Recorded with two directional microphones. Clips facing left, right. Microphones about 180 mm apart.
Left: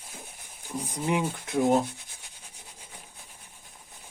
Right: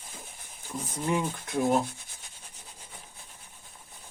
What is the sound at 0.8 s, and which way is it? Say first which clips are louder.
Speech: left 1 dB; 15° left (ahead or behind).